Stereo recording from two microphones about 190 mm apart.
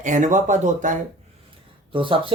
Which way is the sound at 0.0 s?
40° right (ahead or behind).